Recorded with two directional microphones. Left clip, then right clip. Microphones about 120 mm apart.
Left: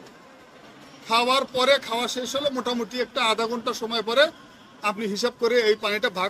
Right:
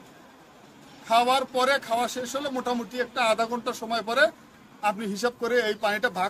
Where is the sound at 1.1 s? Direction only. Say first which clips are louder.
Even; 45° right (ahead or behind).